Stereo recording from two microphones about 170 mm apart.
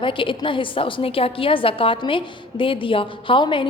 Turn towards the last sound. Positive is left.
turn(degrees=30)  # may be behind; listen again after turning